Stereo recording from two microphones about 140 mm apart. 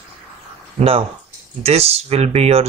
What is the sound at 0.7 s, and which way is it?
Speech, 45° right (ahead or behind).